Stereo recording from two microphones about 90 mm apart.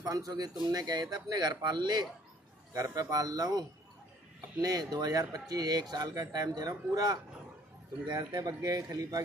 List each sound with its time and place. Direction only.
0.0 s speech: 45° right (ahead or behind)
2.7 s speech: 40° right (ahead or behind)
8.5 s a man's voice: 35° right (ahead or behind)